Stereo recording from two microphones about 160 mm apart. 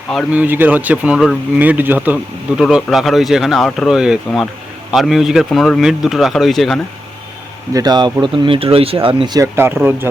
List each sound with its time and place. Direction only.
0.3 s speech: 10° right (ahead or behind)
7.7 s speech: 25° right (ahead or behind)